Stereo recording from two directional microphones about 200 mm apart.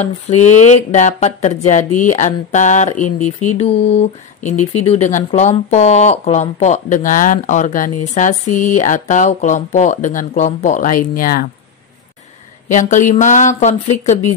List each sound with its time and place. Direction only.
0.0 s speech: 35° left (ahead or behind)
12.6 s speech: 40° left (ahead or behind)